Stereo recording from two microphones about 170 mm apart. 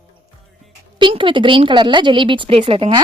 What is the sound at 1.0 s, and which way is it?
A woman's voice, 30° right (ahead or behind).